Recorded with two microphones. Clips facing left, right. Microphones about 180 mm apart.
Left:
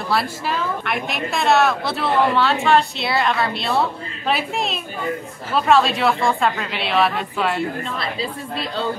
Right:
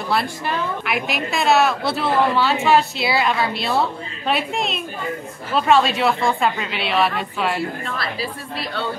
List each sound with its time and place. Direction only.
0.1 s a woman's voice: centre (ahead or behind)
7.8 s a woman's voice: 20° left (ahead or behind)